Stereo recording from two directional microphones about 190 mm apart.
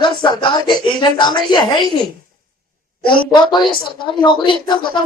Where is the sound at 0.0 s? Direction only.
25° left (ahead or behind).